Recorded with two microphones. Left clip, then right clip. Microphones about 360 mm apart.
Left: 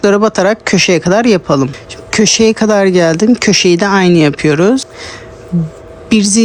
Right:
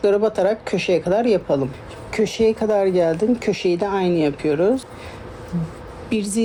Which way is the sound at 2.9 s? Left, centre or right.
Left.